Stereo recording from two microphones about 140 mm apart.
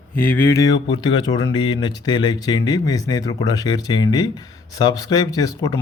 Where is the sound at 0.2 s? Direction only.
15° left (ahead or behind).